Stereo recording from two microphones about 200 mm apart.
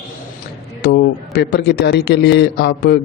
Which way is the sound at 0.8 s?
55° left (ahead or behind).